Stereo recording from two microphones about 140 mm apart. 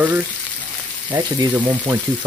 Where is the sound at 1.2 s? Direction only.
30° right (ahead or behind).